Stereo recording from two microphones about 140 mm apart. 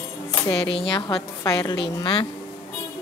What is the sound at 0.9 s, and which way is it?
A woman's voice, 30° left (ahead or behind).